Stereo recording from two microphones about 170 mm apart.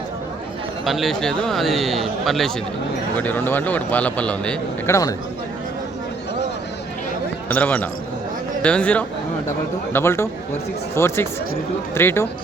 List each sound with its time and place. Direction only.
0.9 s speech: centre (ahead or behind)
3.2 s a man's voice: 10° left (ahead or behind)
7.5 s a man's voice: 10° left (ahead or behind)